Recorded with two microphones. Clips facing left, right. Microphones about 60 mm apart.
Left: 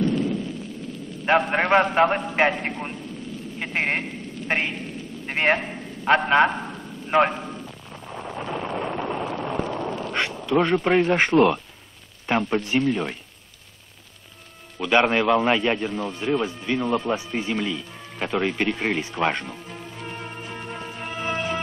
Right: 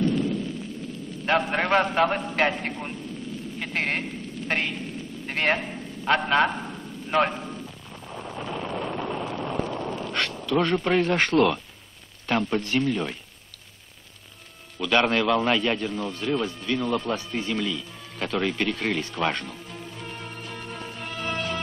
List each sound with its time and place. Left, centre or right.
0.0 s a sound: centre
1.2 s speech: left
3.5 s a sound: centre
10.6 s speech: left
14.8 s speech: centre
20.0 s music: centre